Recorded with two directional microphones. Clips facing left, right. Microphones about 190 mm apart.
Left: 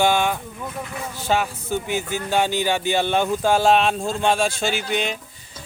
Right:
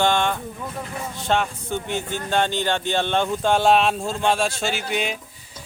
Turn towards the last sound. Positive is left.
turn(degrees=-5)  # may be behind; listen again after turning